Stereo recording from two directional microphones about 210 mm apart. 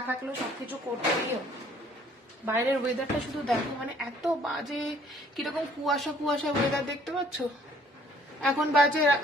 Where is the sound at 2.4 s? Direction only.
10° right (ahead or behind).